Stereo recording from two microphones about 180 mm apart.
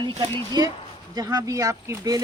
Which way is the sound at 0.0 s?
25° right (ahead or behind).